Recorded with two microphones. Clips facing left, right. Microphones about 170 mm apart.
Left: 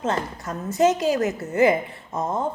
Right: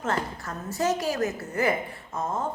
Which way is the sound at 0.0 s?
20° left (ahead or behind).